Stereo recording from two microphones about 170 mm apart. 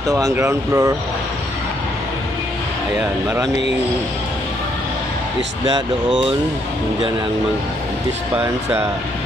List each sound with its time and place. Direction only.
0.1 s speech: 15° right (ahead or behind)
6.0 s speech: 25° right (ahead or behind)